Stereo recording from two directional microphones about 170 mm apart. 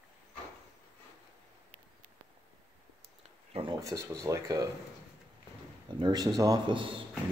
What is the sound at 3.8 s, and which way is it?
Speech, 20° right (ahead or behind).